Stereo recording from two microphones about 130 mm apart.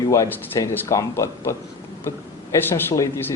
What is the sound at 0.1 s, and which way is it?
A man's voice, 20° left (ahead or behind).